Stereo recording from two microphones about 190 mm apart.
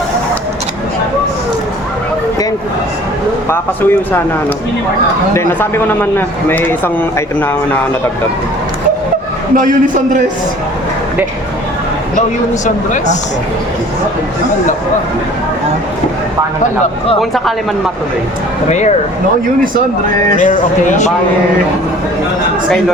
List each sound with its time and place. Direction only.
3.5 s a man's voice: 10° left (ahead or behind)
9.6 s a man's voice: 45° right (ahead or behind)
12.6 s speech: 40° left (ahead or behind)
17.2 s speech: centre (ahead or behind)
20.4 s speech: 40° left (ahead or behind)